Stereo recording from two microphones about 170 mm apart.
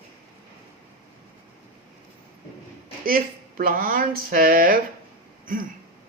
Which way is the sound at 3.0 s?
60° right (ahead or behind).